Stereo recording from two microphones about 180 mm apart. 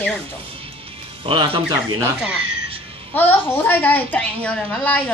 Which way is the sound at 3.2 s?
10° left (ahead or behind).